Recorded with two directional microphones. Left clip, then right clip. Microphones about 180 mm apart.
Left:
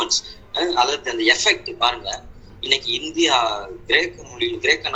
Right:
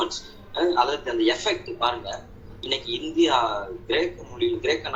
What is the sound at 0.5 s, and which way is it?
A man's voice, 20° left (ahead or behind).